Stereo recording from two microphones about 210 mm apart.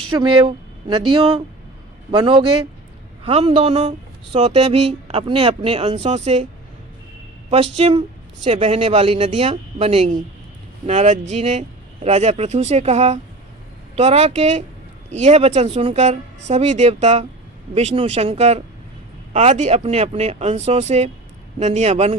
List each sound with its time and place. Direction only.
0.1 s speech: 25° right (ahead or behind)
7.5 s speech: 30° right (ahead or behind)